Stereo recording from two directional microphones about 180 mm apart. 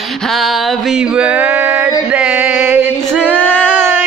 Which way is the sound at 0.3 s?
Centre (ahead or behind).